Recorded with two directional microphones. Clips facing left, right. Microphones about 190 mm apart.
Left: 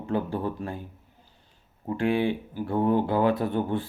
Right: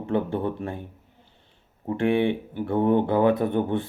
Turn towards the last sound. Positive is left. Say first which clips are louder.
# right 3 dB
turn(degrees=-20)  # may be behind; listen again after turning